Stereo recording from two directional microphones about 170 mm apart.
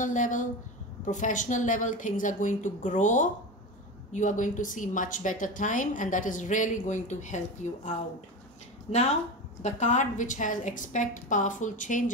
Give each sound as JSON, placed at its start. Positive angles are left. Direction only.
{"t": 0.0, "sound": "a woman's voice", "side_deg": 50}